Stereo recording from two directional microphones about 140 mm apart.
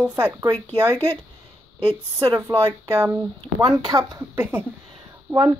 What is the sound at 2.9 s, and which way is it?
Speech, 20° right (ahead or behind).